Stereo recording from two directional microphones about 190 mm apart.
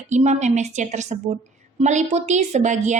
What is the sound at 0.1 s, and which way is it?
A woman's voice, 40° right (ahead or behind).